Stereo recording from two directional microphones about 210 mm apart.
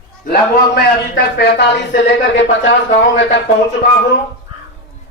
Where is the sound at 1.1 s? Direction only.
50° left (ahead or behind).